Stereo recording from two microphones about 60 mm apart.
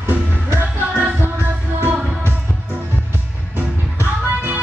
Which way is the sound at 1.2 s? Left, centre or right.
Right.